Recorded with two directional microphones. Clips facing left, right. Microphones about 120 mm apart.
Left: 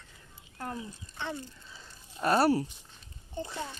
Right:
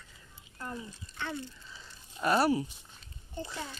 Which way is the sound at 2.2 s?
30° left (ahead or behind).